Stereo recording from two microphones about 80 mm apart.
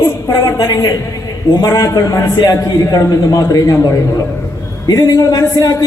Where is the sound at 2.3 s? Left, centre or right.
Left.